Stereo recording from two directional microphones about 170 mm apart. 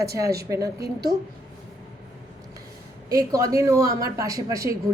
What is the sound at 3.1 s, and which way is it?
Speech, 20° right (ahead or behind).